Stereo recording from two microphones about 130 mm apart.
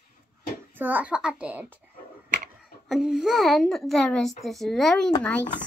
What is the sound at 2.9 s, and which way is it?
A child's voice, 5° right (ahead or behind).